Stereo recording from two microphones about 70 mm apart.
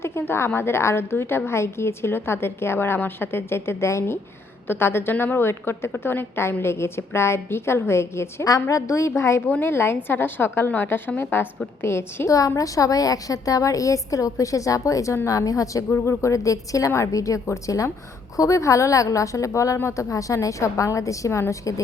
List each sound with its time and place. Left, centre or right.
0.0 s a woman's voice: left
12.5 s a woman's voice: left
15.9 s a woman's voice: left